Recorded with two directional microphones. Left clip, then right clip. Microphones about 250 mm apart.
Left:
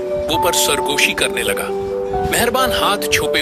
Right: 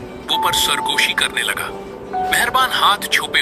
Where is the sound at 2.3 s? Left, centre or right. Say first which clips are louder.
Right 1 dB; left.